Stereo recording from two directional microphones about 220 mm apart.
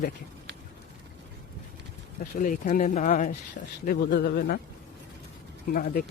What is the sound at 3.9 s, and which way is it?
Speech, 45° left (ahead or behind).